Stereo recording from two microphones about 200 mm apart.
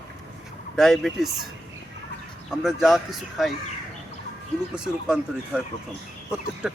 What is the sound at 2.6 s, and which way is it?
Speech, centre (ahead or behind).